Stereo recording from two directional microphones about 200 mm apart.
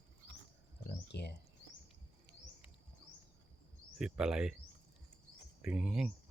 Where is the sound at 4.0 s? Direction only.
5° right (ahead or behind).